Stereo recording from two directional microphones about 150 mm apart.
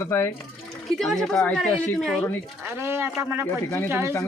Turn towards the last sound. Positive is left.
turn(degrees=-15)  # may be behind; listen again after turning